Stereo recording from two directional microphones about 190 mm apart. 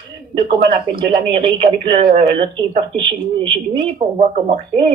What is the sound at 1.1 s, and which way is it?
Speech, 25° right (ahead or behind).